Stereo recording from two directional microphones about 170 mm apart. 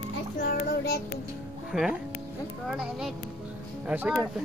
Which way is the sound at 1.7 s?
5° right (ahead or behind).